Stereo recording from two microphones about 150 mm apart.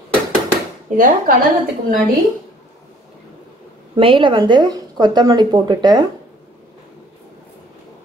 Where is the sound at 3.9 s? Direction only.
35° right (ahead or behind).